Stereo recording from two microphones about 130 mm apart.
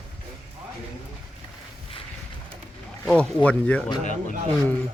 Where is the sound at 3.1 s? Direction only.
10° left (ahead or behind).